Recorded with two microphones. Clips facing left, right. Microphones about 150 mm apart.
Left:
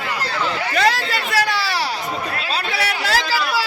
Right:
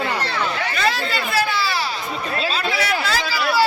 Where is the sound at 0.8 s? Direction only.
80° left.